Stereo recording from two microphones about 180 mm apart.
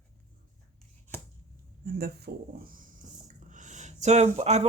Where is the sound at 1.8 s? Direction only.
60° right (ahead or behind).